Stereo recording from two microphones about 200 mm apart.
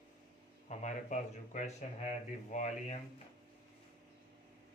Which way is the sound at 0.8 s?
35° left (ahead or behind).